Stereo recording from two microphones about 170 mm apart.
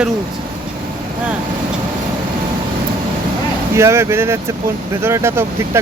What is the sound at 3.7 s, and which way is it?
Speech, 15° right (ahead or behind).